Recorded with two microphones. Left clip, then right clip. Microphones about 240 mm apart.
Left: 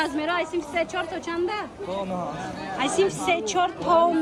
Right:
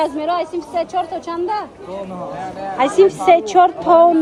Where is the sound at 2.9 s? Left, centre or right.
Centre.